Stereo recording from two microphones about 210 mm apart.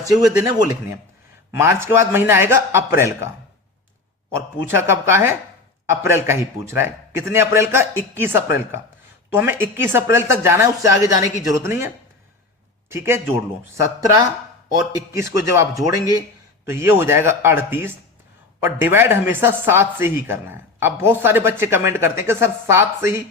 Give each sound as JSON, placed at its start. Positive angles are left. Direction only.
{"t": 0.4, "sound": "a man's voice", "side_deg": -15}
{"t": 12.9, "sound": "a man's voice", "side_deg": -10}